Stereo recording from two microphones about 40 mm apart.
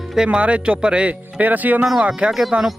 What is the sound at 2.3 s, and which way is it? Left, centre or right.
Speech, centre.